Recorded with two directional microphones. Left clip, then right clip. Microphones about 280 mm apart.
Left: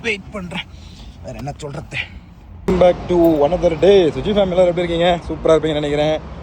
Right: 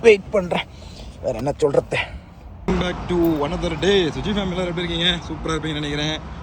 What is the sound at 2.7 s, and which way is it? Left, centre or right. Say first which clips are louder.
Speech: left 10 dB; centre.